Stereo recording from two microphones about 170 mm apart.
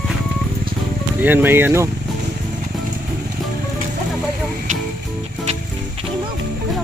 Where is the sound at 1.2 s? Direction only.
10° right (ahead or behind).